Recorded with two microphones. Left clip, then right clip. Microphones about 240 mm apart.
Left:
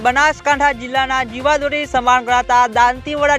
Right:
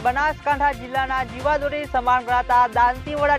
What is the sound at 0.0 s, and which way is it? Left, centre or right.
Speech, left.